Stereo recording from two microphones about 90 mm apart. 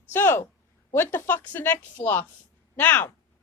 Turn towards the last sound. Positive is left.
turn(degrees=20)  # may be behind; listen again after turning